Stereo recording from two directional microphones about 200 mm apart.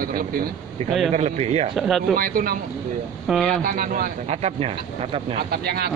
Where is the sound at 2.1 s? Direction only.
45° right (ahead or behind).